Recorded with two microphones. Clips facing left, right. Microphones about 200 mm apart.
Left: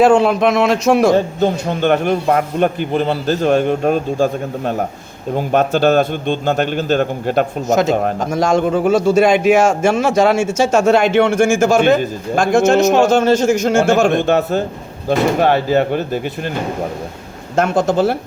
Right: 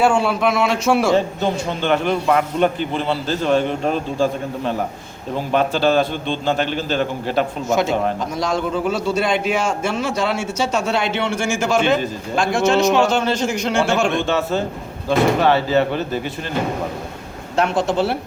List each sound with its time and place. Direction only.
0.0 s a man's voice: 40° left (ahead or behind)
14.3 s a man's voice: 60° left (ahead or behind)
17.6 s a man's voice: 45° left (ahead or behind)